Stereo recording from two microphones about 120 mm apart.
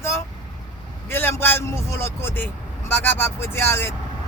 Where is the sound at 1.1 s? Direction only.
15° left (ahead or behind).